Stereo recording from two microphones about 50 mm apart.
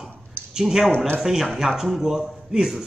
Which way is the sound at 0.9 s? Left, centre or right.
Left.